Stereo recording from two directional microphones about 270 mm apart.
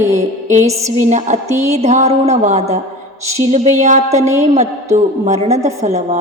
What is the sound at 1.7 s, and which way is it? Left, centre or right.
A woman's voice, right.